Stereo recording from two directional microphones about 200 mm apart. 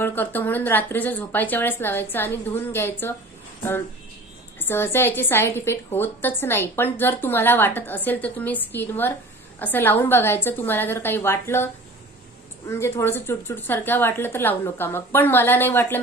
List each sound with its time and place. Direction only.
0.0 s a woman's voice: 10° left (ahead or behind)
4.6 s a woman's voice: 10° left (ahead or behind)